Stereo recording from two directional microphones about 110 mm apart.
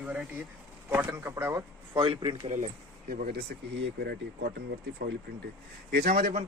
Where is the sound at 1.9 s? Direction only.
50° right (ahead or behind).